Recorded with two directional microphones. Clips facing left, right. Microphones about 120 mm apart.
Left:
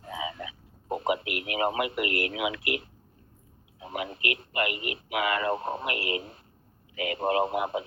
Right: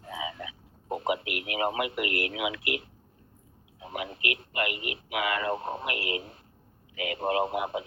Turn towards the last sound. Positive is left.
turn(degrees=40)  # may be behind; listen again after turning